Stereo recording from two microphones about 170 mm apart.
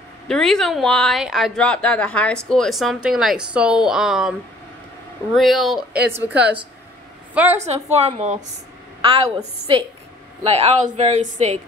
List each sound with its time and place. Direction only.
0.3 s a woman's voice: 5° left (ahead or behind)
7.5 s a woman's voice: 40° right (ahead or behind)
9.0 s a woman's voice: 30° right (ahead or behind)
10.4 s a woman's voice: 40° right (ahead or behind)